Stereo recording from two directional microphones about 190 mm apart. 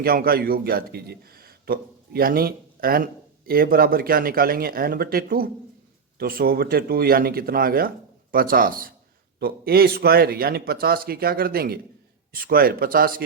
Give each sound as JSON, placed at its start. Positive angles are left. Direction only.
{"t": 0.0, "sound": "a man's voice", "side_deg": -50}